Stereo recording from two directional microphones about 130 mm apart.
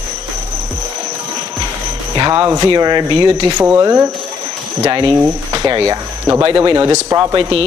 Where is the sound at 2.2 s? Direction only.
30° right (ahead or behind).